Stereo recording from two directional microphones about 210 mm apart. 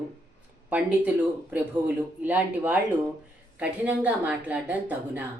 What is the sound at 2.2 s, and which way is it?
A woman's voice, 10° right (ahead or behind).